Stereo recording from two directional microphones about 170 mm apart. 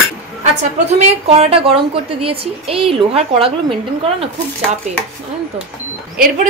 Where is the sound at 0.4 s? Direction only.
40° right (ahead or behind).